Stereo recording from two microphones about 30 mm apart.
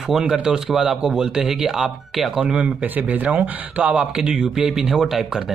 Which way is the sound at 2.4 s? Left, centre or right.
Right.